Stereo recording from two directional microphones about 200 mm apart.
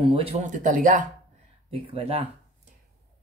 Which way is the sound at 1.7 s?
30° right (ahead or behind).